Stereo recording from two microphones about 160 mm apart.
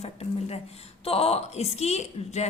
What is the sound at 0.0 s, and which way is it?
A woman's voice, 40° left (ahead or behind).